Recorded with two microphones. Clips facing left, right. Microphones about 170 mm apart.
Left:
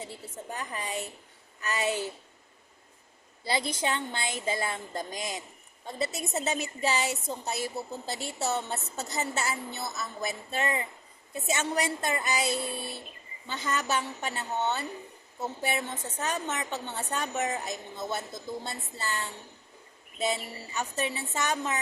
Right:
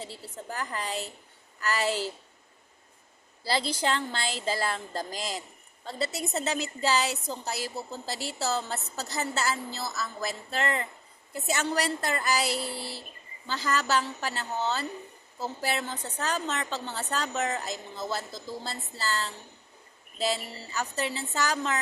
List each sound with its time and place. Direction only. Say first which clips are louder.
0.0 s a woman's voice: even; 20° left (ahead or behind)
3.4 s a woman's voice: right 2 dB; 20° left (ahead or behind)